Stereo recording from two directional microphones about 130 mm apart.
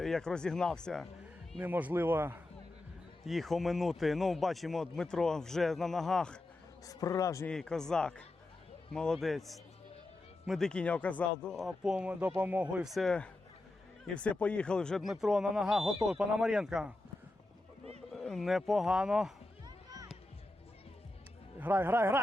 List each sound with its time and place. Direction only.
0.0 s speech: 5° left (ahead or behind)
1.5 s a man's voice: 15° right (ahead or behind)
3.2 s speech: centre (ahead or behind)
6.8 s a man's voice: 25° left (ahead or behind)
7.4 s speech: 5° left (ahead or behind)
11.6 s a man's voice: 5° right (ahead or behind)
18.1 s speech: centre (ahead or behind)
19.6 s music: 30° right (ahead or behind)
21.6 s a man's voice: 15° right (ahead or behind)